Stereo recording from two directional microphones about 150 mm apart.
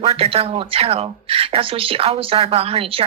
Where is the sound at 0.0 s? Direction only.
40° right (ahead or behind).